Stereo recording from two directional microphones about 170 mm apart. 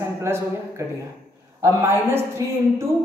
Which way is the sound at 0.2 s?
15° right (ahead or behind).